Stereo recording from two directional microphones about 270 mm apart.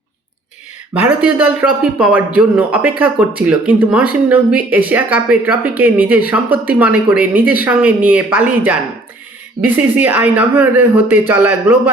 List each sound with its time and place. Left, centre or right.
0.9 s speech: centre